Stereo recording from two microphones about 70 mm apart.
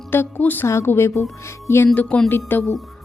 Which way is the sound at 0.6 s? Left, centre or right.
Left.